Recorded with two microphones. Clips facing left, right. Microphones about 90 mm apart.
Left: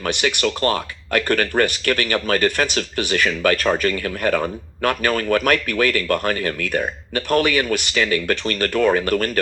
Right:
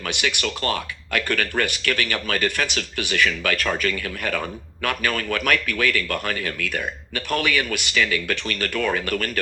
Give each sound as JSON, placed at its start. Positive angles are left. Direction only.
{"t": 0.0, "sound": "speech", "side_deg": 40}